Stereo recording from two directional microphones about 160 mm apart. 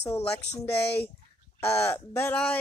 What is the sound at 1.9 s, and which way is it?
Speech, 15° left (ahead or behind).